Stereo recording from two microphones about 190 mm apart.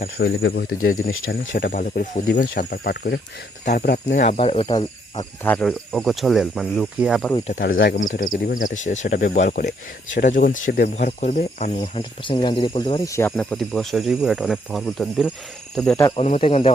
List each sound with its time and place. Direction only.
0.0 s speech: 55° left (ahead or behind)
3.9 s speech: 40° left (ahead or behind)
5.4 s speech: 10° left (ahead or behind)
7.3 s speech: 35° left (ahead or behind)
7.6 s speech: 65° left (ahead or behind)
7.9 s speech: 40° left (ahead or behind); by 16.0 s 5° left (ahead or behind)
16.1 s speech: 35° left (ahead or behind)